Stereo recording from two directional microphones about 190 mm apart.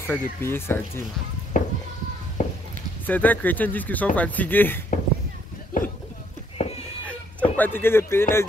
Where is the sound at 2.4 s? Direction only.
40° left (ahead or behind).